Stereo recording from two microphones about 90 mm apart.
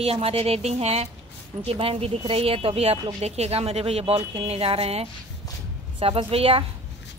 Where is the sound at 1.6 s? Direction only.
90° right.